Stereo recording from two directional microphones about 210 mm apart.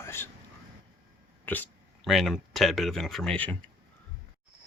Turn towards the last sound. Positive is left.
turn(degrees=5)  # may be behind; listen again after turning